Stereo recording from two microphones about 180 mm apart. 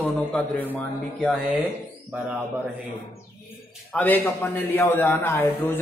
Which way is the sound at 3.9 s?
10° left (ahead or behind).